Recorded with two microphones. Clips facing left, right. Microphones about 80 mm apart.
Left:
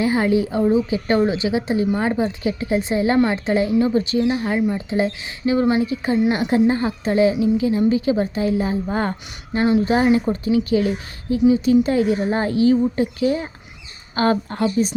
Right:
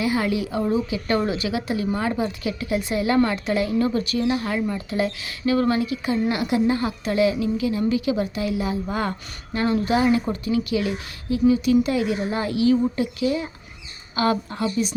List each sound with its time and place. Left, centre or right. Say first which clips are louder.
0.0 s a woman's voice: left 5 dB; left